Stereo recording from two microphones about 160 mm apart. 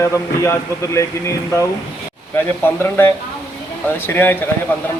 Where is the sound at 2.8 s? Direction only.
15° left (ahead or behind).